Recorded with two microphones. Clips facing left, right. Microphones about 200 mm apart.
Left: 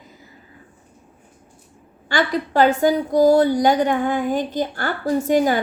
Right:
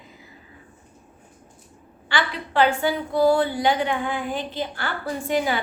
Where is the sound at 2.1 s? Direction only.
45° left (ahead or behind).